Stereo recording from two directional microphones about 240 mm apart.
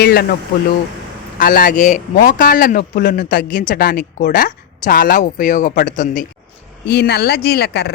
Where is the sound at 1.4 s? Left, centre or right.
Left.